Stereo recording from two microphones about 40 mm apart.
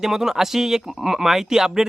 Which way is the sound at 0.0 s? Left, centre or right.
Centre.